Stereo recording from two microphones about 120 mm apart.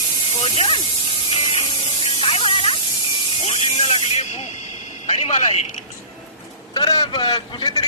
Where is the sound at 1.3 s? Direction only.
50° left (ahead or behind).